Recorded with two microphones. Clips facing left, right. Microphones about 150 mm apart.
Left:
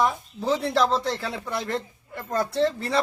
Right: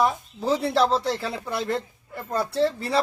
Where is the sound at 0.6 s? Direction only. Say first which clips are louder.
Right 2 dB; 30° right (ahead or behind).